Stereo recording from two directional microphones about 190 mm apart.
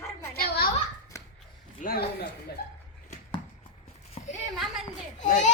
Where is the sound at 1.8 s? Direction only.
50° left (ahead or behind).